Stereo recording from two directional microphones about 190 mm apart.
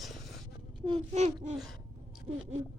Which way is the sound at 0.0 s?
Centre (ahead or behind).